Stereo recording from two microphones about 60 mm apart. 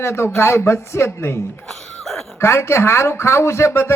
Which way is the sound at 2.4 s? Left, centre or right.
Left.